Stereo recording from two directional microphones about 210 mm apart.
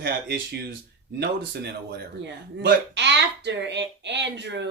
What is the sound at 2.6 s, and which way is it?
A woman's voice, 55° right (ahead or behind).